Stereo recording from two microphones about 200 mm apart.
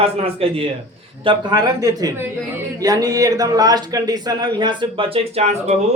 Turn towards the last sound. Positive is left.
turn(degrees=-30)  # may be behind; listen again after turning